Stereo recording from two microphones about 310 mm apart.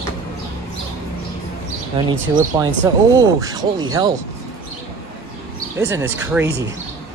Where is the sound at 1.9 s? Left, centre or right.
Centre.